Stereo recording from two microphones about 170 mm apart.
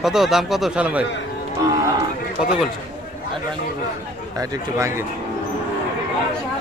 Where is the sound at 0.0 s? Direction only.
Centre (ahead or behind).